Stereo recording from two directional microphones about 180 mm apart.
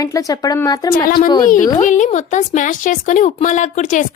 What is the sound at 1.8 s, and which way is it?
Speech, 45° left (ahead or behind).